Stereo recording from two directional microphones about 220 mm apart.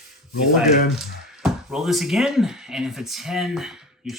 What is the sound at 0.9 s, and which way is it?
Speech, centre (ahead or behind).